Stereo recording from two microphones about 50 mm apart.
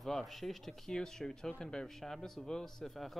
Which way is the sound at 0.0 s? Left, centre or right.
Centre.